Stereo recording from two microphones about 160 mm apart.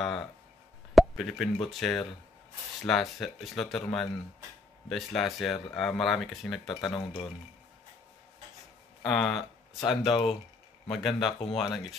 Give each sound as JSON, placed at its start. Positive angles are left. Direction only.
{"t": 0.0, "sound": "a sound", "side_deg": 0}
{"t": 0.9, "sound": "plop", "side_deg": 0}
{"t": 1.7, "sound": "speech", "side_deg": 0}
{"t": 9.0, "sound": "speech", "side_deg": 0}
{"t": 10.0, "sound": "speech", "side_deg": 35}
{"t": 10.9, "sound": "speech", "side_deg": 0}